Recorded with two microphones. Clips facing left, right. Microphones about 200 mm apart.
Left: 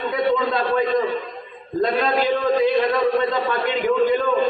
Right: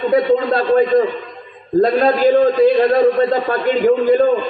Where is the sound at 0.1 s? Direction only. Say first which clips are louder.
Right 6 dB; 40° right (ahead or behind).